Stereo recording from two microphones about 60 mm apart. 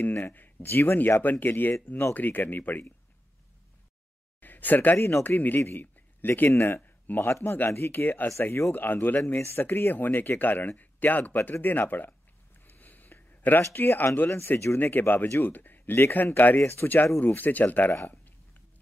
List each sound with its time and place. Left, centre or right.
0.0 s speech: left
4.4 s a sound: left
4.9 s speech: left
5.2 s a man's voice: left
16.5 s speech: left
16.8 s speech: left
18.0 s a sound: left